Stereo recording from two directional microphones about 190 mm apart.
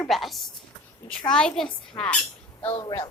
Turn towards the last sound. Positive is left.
turn(degrees=15)  # may be behind; listen again after turning